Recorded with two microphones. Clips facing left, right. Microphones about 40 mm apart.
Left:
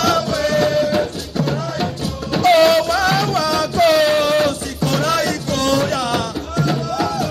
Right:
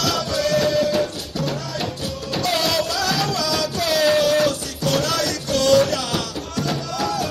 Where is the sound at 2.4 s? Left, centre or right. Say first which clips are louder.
Left 10 dB; left.